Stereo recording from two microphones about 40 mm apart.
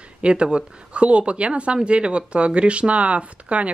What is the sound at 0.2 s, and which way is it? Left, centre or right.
Speech, right.